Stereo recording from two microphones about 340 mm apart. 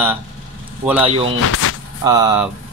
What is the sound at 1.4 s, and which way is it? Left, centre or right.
Speech, left.